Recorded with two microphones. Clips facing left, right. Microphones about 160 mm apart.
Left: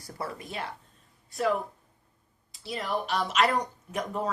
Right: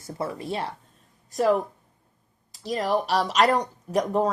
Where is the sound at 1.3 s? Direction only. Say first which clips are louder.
Right 6 dB; 40° right (ahead or behind).